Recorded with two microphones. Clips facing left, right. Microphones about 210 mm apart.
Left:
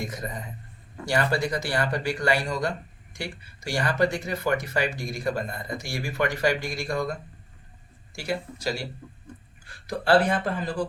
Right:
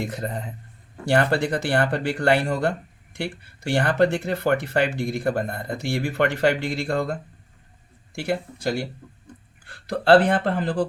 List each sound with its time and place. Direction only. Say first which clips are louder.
0.0 s speech: right 5 dB; 65° right (ahead or behind)